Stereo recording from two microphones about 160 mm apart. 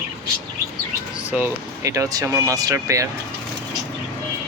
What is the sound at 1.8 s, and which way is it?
Speech, 20° right (ahead or behind).